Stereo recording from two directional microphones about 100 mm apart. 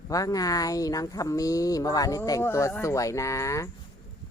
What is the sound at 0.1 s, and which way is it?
Speech, 35° left (ahead or behind).